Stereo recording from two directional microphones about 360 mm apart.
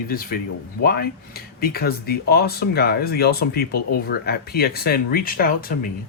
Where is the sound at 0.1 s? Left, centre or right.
Left.